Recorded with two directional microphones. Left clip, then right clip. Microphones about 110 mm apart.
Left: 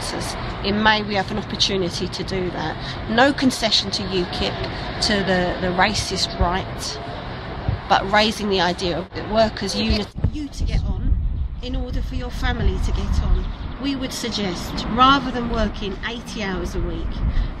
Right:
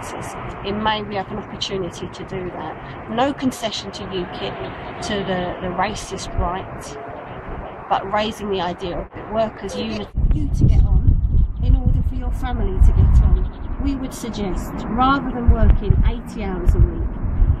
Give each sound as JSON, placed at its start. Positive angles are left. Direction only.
{"t": 0.7, "sound": "speech", "side_deg": 30}
{"t": 7.9, "sound": "speech", "side_deg": 30}
{"t": 14.2, "sound": "speech", "side_deg": 20}